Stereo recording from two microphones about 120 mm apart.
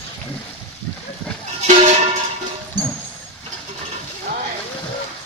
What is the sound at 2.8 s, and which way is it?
Music, 90° right.